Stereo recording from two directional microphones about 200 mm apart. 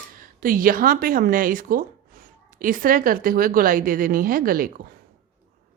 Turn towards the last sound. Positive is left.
turn(degrees=-45)  # may be behind; listen again after turning